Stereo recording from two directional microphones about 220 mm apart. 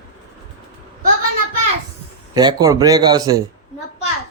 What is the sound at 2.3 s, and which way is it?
Speech, 20° right (ahead or behind).